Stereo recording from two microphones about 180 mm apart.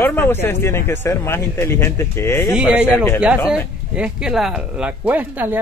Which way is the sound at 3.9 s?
5° right (ahead or behind).